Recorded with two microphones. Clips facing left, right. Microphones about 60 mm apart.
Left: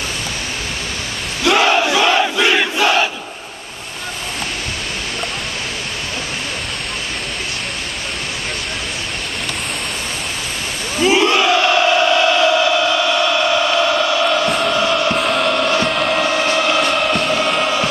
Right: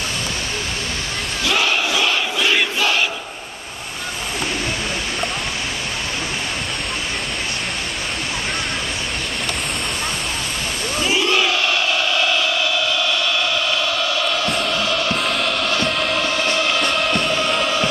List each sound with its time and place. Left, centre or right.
1.4 s battle cry: left
11.0 s battle cry: left
11.6 s chant: left; by 14.5 s centre
14.7 s music: left
15.1 s music: centre
15.7 s music: centre
16.0 s a sound: centre
16.8 s music: centre